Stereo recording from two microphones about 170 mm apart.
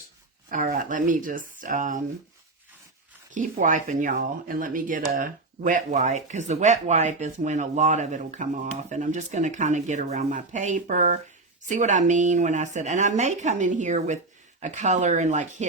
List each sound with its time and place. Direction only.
0.5 s speech: 50° right (ahead or behind)
3.3 s speech: 50° right (ahead or behind)